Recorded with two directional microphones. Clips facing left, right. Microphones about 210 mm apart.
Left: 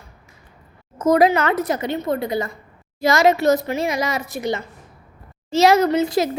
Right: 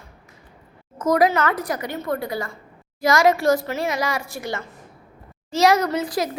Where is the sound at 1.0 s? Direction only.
25° left (ahead or behind).